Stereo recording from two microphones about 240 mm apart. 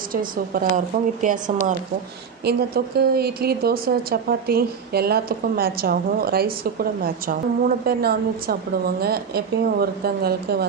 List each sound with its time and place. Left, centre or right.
0.1 s speech: right